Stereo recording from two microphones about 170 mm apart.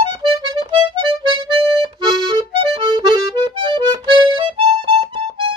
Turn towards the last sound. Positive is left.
turn(degrees=-30)  # may be behind; listen again after turning